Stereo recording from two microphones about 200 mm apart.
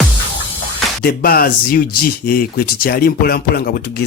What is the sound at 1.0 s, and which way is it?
Speech, 50° left (ahead or behind).